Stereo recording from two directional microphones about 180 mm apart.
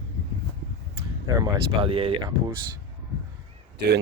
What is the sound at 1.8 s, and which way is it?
Speech, 30° right (ahead or behind).